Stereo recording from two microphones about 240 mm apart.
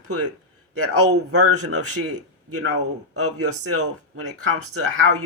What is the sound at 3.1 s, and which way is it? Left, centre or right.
Speech, right.